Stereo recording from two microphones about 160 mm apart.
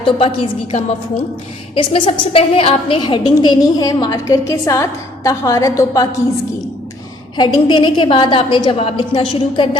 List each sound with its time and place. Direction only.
0.2 s a woman's voice: 35° left (ahead or behind)
7.3 s a woman's voice: 30° left (ahead or behind)